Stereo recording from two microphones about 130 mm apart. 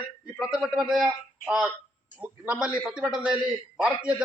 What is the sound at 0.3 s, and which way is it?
A man's voice, 5° right (ahead or behind).